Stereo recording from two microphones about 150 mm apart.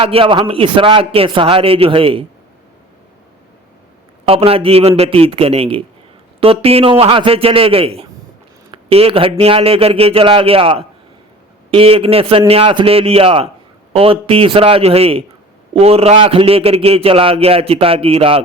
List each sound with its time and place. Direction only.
0.0 s a man's voice: 35° right (ahead or behind)
4.3 s a man's voice: 40° right (ahead or behind)